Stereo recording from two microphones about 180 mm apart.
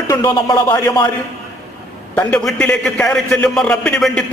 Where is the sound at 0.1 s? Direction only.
20° left (ahead or behind).